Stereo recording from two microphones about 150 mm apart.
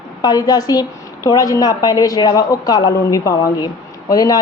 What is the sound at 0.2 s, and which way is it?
A woman's voice, 25° left (ahead or behind).